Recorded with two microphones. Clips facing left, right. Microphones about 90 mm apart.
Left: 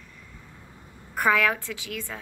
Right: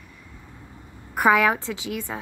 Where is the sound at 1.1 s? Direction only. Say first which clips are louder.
Right 4 dB; 15° right (ahead or behind).